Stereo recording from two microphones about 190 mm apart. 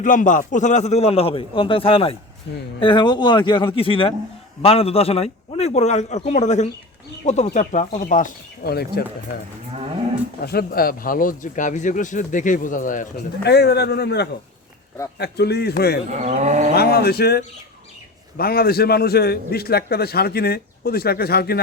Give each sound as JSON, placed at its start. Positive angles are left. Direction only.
{"t": 0.0, "sound": "a man's voice", "side_deg": 40}
{"t": 10.4, "sound": "speech", "side_deg": 55}
{"t": 13.5, "sound": "a man's voice", "side_deg": 60}
{"t": 16.2, "sound": "livestock", "side_deg": -35}
{"t": 16.7, "sound": "a man's voice", "side_deg": 55}